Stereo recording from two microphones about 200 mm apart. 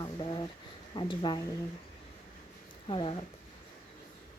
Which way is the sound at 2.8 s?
25° left (ahead or behind).